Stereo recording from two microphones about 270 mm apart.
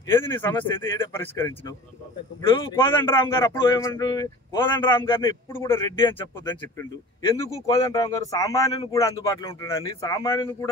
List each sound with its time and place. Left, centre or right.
0.1 s speech: centre
2.5 s speech: centre